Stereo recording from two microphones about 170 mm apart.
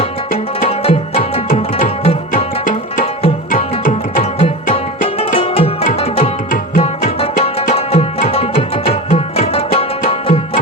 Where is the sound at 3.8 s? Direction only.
50° left (ahead or behind).